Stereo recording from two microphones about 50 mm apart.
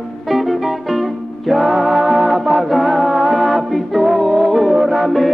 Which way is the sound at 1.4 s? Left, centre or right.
Centre.